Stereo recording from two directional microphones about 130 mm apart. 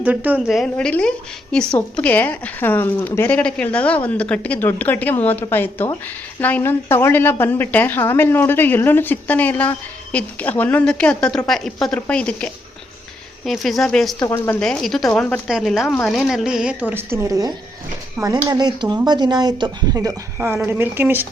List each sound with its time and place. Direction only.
0.0 s speech: 10° right (ahead or behind)
0.4 s a woman's voice: centre (ahead or behind)
14.2 s speech: 25° left (ahead or behind)
14.6 s speech: 5° left (ahead or behind)
16.9 s speech: 20° right (ahead or behind)